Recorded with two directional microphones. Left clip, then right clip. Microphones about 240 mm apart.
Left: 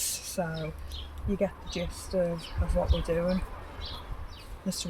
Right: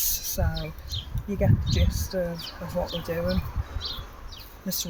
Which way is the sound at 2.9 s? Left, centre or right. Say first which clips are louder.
Right 1 dB; right.